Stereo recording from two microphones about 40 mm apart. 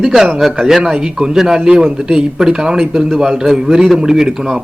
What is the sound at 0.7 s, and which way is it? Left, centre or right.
Speech, centre.